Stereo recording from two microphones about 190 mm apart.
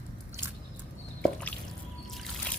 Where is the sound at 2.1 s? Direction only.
Centre (ahead or behind).